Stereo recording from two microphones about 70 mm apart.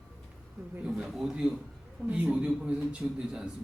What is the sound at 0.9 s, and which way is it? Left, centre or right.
A man's voice, centre.